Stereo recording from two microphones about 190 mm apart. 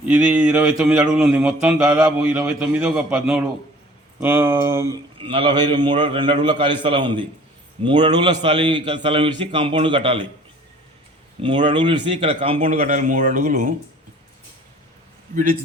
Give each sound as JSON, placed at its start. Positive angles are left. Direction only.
{"t": 0.1, "sound": "a sound", "side_deg": -5}
{"t": 1.9, "sound": "a man's voice", "side_deg": -20}
{"t": 2.6, "sound": "a sound", "side_deg": -5}
{"t": 4.2, "sound": "speech", "side_deg": -10}
{"t": 5.2, "sound": "a man's voice", "side_deg": -25}
{"t": 11.4, "sound": "speech", "side_deg": -25}